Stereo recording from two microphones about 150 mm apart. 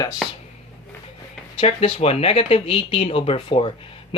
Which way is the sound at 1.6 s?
40° left (ahead or behind).